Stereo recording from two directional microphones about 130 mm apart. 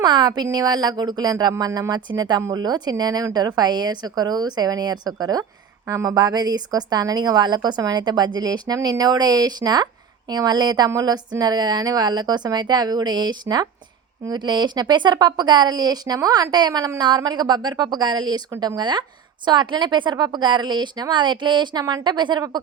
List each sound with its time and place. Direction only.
0.0 s a woman's voice: 35° right (ahead or behind)
18.5 s speech: 20° right (ahead or behind)
18.8 s a woman's voice: 35° right (ahead or behind)